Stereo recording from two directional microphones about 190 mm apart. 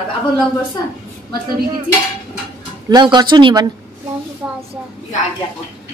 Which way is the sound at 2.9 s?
20° right (ahead or behind).